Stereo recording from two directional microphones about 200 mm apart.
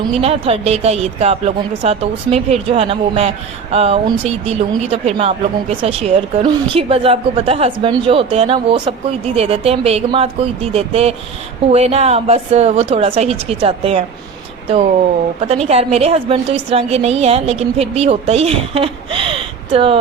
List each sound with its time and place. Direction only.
0.1 s a woman's voice: 30° right (ahead or behind)
15.6 s a woman's voice: 30° right (ahead or behind)